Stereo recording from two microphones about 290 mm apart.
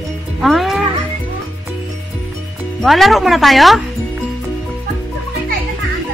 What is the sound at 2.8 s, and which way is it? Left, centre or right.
Speech, centre.